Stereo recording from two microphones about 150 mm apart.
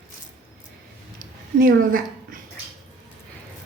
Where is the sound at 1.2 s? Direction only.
70° right (ahead or behind).